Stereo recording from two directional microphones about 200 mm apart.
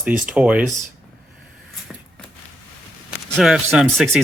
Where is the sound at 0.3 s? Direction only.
5° right (ahead or behind).